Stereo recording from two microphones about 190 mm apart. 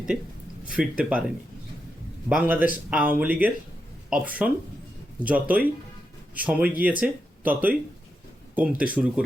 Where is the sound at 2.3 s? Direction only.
10° right (ahead or behind).